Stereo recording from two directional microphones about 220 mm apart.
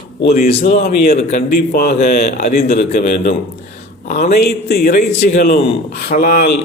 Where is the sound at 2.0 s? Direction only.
35° left (ahead or behind).